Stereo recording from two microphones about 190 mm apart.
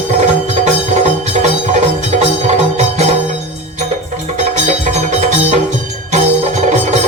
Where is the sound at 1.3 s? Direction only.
35° right (ahead or behind).